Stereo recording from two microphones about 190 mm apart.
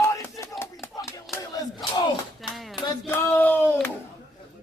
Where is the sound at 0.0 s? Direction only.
15° left (ahead or behind).